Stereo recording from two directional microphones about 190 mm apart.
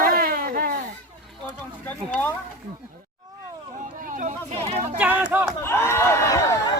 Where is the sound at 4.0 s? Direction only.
45° right (ahead or behind).